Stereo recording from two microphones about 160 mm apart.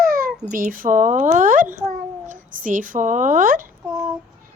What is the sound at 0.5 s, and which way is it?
A child's voice, 55° right (ahead or behind).